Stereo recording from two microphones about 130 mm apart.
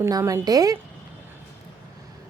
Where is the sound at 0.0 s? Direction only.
25° right (ahead or behind).